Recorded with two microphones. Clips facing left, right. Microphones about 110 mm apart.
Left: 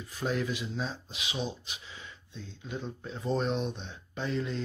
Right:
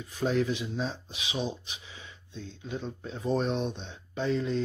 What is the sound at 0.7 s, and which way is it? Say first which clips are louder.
Speech: right 2 dB; 20° right (ahead or behind).